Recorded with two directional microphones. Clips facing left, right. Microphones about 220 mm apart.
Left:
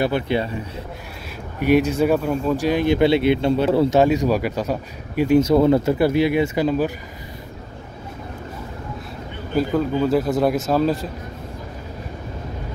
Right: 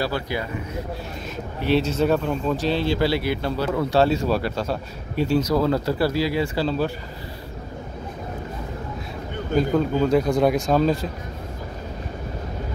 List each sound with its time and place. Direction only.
0.0 s speech: 25° left (ahead or behind)
1.6 s speech: 15° left (ahead or behind)
5.4 s speech: 25° left (ahead or behind)
9.6 s speech: 5° left (ahead or behind)